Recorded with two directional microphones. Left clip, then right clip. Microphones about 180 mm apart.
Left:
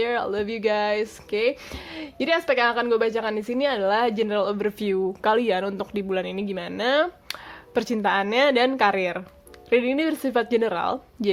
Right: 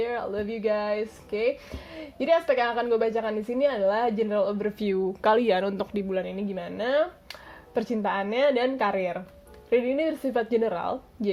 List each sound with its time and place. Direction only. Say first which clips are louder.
0.0 s speech: left 4 dB; 20° left (ahead or behind)
4.9 s speech: even; 5° left (ahead or behind)
6.1 s a woman's voice: left 3 dB; 15° left (ahead or behind)